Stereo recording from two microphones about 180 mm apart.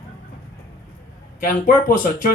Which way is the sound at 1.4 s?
50° left (ahead or behind).